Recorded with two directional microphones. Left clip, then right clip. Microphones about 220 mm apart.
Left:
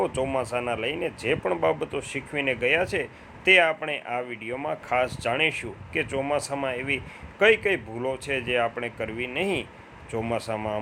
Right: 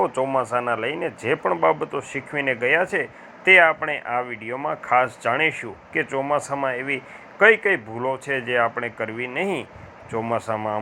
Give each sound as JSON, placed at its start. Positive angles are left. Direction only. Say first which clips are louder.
{"t": 0.0, "sound": "speech", "louder": "right 5 dB", "side_deg": 5}